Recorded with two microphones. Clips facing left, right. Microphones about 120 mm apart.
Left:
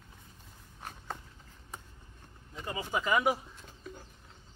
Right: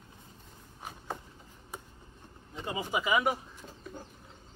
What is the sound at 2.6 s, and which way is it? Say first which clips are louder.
Bird: right 1 dB; 15° right (ahead or behind).